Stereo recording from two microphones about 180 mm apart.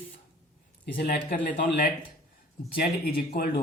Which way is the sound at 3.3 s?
60° left (ahead or behind).